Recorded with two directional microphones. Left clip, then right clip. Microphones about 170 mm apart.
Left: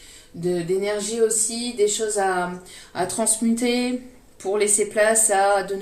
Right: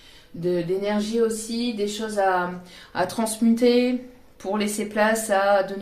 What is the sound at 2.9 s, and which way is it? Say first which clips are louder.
Speech: left 1 dB; 35° right (ahead or behind).